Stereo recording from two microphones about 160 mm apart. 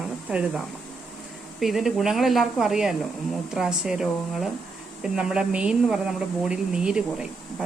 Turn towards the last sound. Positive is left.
turn(degrees=-5)  # may be behind; listen again after turning